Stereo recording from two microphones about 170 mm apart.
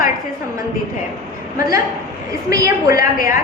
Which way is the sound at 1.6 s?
20° right (ahead or behind).